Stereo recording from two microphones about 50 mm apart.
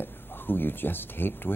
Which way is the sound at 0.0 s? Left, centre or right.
Left.